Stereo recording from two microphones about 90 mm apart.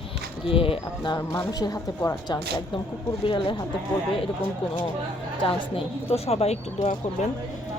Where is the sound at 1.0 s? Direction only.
55° left (ahead or behind); by 2.2 s 35° left (ahead or behind).